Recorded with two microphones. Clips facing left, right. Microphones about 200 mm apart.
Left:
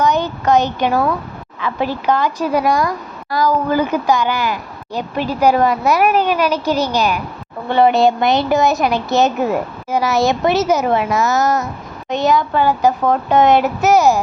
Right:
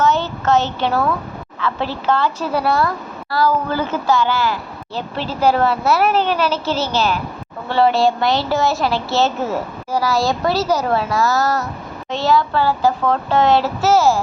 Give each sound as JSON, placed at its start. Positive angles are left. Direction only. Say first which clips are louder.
{"t": 0.0, "sound": "a child's voice", "louder": "left 1 dB", "side_deg": 15}